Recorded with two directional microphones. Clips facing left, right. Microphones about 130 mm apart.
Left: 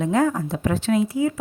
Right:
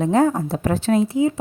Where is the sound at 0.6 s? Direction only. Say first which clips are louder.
Right 2 dB; 40° right (ahead or behind); by 1.4 s 25° right (ahead or behind).